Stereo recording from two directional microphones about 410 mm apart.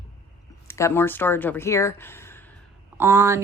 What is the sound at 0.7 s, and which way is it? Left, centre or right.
Speech, centre.